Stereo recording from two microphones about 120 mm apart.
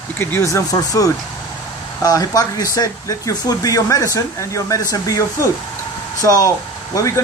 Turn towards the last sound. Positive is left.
turn(degrees=25)  # may be behind; listen again after turning